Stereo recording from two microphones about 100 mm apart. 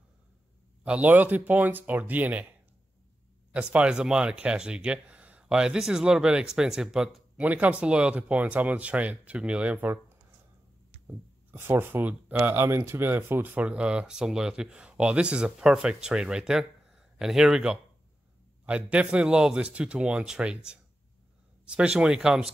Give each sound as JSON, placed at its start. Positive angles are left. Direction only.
{"t": 0.8, "sound": "speech", "side_deg": -15}
{"t": 3.5, "sound": "speech", "side_deg": -10}
{"t": 11.1, "sound": "speech", "side_deg": -25}